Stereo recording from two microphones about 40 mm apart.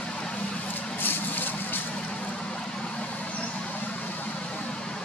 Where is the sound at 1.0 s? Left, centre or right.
Left.